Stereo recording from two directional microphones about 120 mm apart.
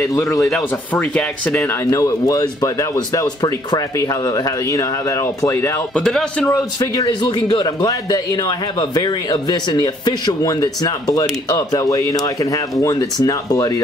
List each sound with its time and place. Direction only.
0.0 s speech: 25° left (ahead or behind)
0.9 s speech: 10° left (ahead or behind)
1.6 s speech: 25° left (ahead or behind)
5.9 s speech: 5° left (ahead or behind)
6.5 s speech: 25° left (ahead or behind)
7.1 s a man's voice: 40° left (ahead or behind)